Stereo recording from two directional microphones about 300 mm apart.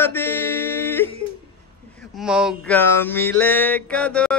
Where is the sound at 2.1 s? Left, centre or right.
Centre.